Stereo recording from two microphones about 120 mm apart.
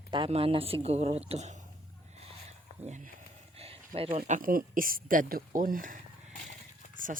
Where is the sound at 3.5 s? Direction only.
55° right (ahead or behind).